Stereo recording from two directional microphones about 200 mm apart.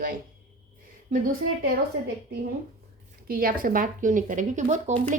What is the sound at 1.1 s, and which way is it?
Speech, 45° right (ahead or behind).